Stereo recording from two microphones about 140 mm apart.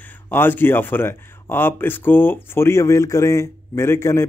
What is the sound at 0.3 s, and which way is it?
Speech, 15° left (ahead or behind).